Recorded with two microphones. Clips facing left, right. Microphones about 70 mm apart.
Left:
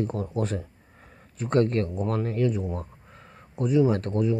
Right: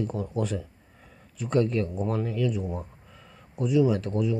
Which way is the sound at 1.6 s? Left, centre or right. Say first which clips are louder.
Left 2 dB; left.